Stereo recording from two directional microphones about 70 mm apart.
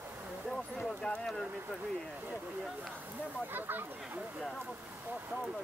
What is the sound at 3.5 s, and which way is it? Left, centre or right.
Speech, right.